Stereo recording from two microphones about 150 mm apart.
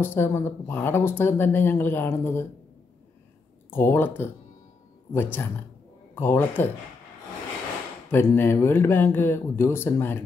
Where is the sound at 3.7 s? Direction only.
15° left (ahead or behind).